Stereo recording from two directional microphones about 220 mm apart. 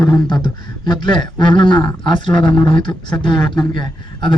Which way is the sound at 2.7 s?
20° left (ahead or behind).